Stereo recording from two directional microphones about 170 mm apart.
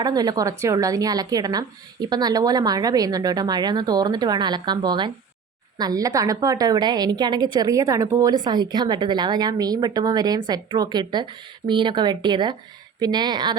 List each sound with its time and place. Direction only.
0.0 s a woman's voice: 25° right (ahead or behind)